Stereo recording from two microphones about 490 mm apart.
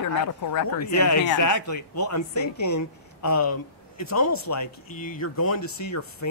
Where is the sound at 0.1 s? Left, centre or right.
Left.